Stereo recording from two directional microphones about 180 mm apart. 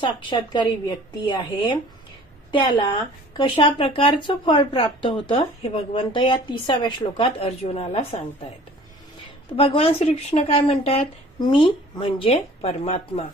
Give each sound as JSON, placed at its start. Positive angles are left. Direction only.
{"t": 0.0, "sound": "a woman's voice", "side_deg": 25}
{"t": 9.5, "sound": "speech", "side_deg": 30}